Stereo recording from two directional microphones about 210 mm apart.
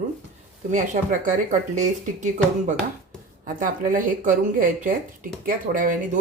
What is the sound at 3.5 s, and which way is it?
Speech, 40° right (ahead or behind).